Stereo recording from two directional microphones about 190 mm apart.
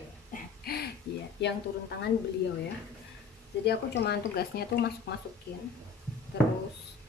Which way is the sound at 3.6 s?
60° left (ahead or behind).